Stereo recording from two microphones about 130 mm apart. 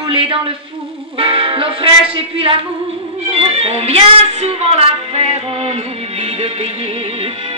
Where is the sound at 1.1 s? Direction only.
45° right (ahead or behind).